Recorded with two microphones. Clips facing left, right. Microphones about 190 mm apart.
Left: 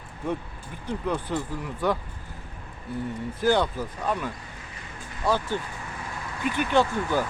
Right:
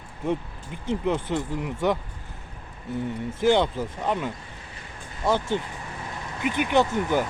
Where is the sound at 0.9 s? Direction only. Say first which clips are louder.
Right 3 dB; 20° right (ahead or behind).